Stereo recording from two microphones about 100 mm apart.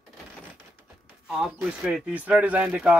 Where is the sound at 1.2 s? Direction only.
5° right (ahead or behind).